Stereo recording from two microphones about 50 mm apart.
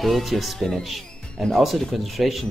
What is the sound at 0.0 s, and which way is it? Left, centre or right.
Speech, centre.